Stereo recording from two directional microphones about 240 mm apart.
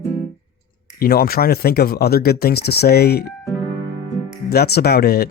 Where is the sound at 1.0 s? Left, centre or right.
Left.